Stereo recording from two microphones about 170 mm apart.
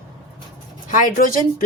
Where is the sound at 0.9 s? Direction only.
50° left (ahead or behind).